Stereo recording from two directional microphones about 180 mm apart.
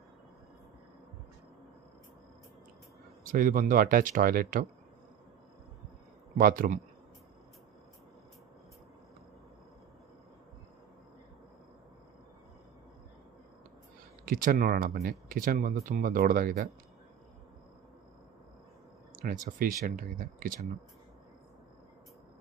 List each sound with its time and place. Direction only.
3.3 s speech: 50° right (ahead or behind)
6.3 s speech: 50° right (ahead or behind)
14.2 s speech: 50° right (ahead or behind)
19.4 s speech: 50° right (ahead or behind)